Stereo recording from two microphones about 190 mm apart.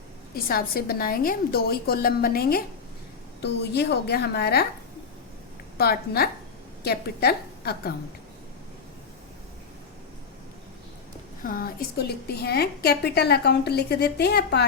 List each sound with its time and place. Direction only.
0.3 s a woman's voice: 50° left (ahead or behind)
5.7 s a woman's voice: 55° left (ahead or behind)
11.4 s a woman's voice: 50° left (ahead or behind)